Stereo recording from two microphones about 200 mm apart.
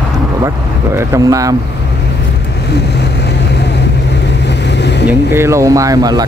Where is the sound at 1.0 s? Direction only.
15° right (ahead or behind).